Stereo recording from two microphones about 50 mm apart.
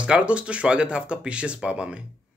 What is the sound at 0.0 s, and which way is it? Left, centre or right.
Speech, right.